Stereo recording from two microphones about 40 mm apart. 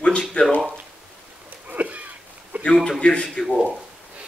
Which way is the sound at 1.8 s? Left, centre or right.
Right.